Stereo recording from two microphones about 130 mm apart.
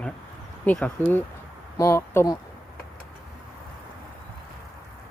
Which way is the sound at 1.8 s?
20° left (ahead or behind).